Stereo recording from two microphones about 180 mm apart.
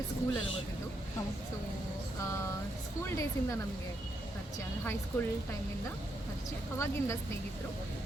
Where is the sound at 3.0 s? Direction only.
15° left (ahead or behind).